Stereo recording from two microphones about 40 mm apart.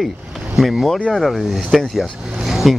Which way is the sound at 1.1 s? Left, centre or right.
Centre.